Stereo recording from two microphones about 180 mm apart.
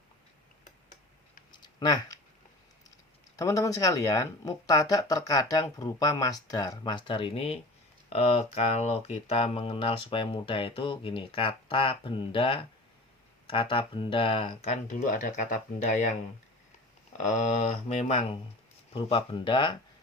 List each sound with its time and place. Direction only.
1.5 s a sound: 20° left (ahead or behind)
3.3 s speech: 20° left (ahead or behind); by 16.1 s 40° left (ahead or behind)
17.2 s speech: 40° left (ahead or behind)